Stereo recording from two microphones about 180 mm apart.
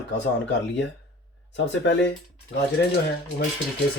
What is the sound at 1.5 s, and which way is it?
Speech, 80° left.